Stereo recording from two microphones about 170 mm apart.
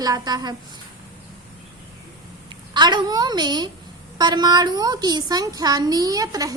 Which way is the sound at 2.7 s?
25° right (ahead or behind).